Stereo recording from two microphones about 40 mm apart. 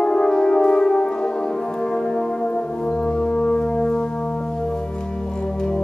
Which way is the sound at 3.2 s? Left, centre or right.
Left.